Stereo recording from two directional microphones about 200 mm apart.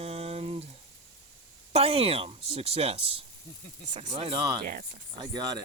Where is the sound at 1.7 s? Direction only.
30° right (ahead or behind).